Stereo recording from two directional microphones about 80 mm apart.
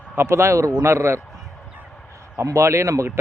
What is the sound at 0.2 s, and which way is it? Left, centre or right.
Speech, right.